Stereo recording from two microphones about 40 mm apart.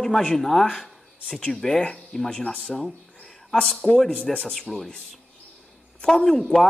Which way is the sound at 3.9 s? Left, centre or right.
Left.